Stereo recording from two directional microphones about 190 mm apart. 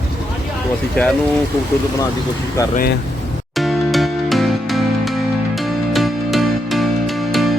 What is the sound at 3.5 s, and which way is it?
Music, centre (ahead or behind).